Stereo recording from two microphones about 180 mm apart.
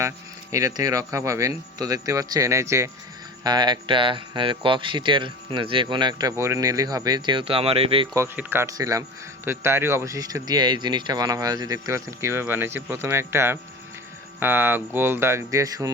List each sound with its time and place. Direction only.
0.5 s speech: 20° right (ahead or behind)
8.1 s speech: 15° right (ahead or behind)